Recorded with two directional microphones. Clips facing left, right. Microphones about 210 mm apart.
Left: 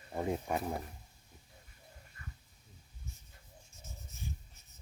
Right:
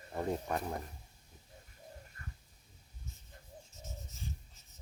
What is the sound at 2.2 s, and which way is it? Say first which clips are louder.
Dog: left 3 dB; 40° right (ahead or behind).